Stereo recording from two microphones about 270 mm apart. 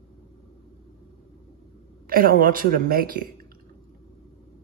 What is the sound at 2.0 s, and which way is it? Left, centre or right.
Speech, right.